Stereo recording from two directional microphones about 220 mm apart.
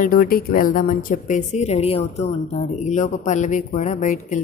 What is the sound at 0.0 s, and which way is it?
A man's voice, 40° left (ahead or behind).